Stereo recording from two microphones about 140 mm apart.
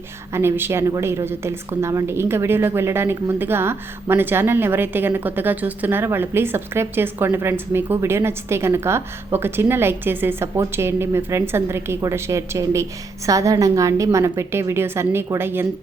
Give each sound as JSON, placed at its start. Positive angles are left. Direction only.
{"t": 0.3, "sound": "a woman's voice", "side_deg": -15}